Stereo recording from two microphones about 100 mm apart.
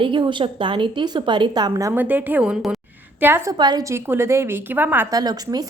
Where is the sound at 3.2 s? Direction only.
20° right (ahead or behind).